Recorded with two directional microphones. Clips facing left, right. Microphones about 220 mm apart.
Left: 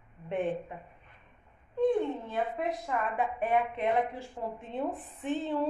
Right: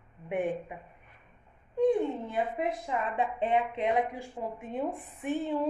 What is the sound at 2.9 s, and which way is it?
A woman's voice, 20° right (ahead or behind).